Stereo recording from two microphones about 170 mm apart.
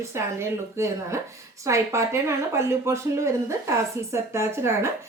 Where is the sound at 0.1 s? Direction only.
15° right (ahead or behind).